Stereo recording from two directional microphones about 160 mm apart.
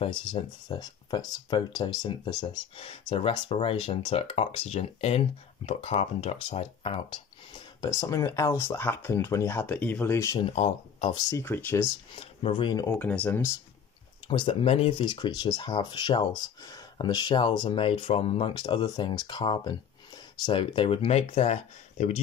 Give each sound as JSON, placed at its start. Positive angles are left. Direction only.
{"t": 0.0, "sound": "speech", "side_deg": 30}
{"t": 2.8, "sound": "speech", "side_deg": 35}
{"t": 10.4, "sound": "speech", "side_deg": 40}
{"t": 11.1, "sound": "speech", "side_deg": 20}
{"t": 12.2, "sound": "speech", "side_deg": 35}
{"t": 13.0, "sound": "speech", "side_deg": 10}
{"t": 14.2, "sound": "speech", "side_deg": 30}